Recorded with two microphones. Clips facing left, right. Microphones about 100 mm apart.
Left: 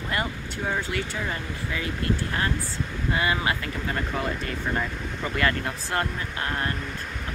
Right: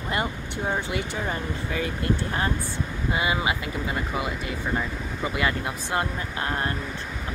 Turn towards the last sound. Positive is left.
turn(degrees=-25)  # may be behind; listen again after turning